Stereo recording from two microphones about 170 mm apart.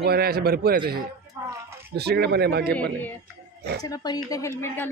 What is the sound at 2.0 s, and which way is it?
Speech, 75° right (ahead or behind).